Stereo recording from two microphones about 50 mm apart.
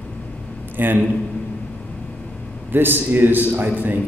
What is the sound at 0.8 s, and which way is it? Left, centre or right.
Speech, right.